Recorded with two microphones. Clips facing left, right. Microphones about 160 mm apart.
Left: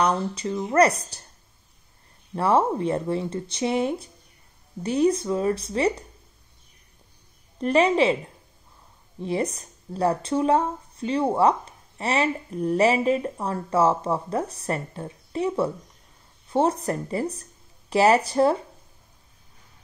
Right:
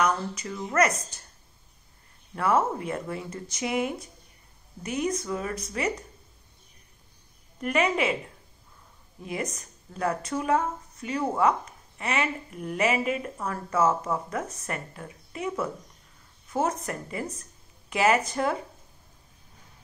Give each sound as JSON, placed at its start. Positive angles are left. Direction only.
{"t": 0.0, "sound": "speech", "side_deg": 30}
{"t": 2.3, "sound": "speech", "side_deg": 30}
{"t": 7.6, "sound": "speech", "side_deg": 30}
{"t": 9.2, "sound": "speech", "side_deg": 30}